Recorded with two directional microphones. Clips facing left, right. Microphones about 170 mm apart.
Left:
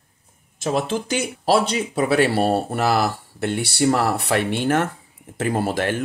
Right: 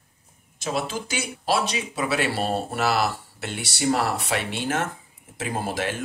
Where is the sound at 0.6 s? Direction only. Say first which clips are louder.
Left 5 dB; 50° left (ahead or behind).